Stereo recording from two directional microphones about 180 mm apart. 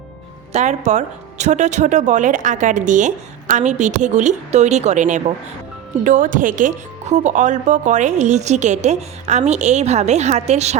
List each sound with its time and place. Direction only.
0.5 s speech: 40° right (ahead or behind)